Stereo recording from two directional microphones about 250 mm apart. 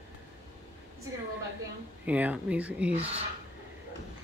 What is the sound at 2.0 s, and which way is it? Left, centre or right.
Speech, centre.